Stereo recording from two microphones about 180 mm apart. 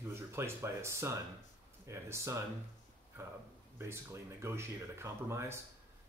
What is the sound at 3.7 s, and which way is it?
Speech, 15° right (ahead or behind).